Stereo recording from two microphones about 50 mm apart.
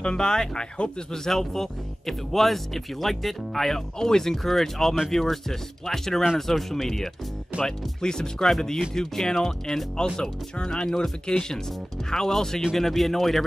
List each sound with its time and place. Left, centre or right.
0.0 s speech: centre